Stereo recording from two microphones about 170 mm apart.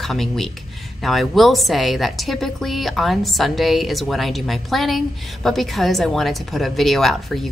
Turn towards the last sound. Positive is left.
turn(degrees=0)  # may be behind; listen again after turning